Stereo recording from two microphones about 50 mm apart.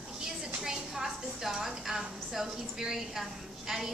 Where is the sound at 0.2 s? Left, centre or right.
Centre.